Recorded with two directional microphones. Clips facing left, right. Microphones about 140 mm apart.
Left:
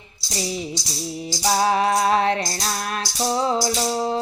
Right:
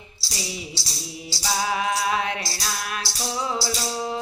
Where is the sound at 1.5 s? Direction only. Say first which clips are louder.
Left 6 dB; 40° left (ahead or behind).